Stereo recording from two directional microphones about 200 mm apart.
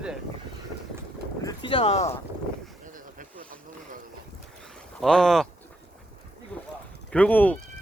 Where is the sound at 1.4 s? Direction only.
25° left (ahead or behind).